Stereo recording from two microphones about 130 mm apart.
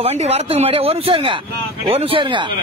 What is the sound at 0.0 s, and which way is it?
Speech, 50° right (ahead or behind).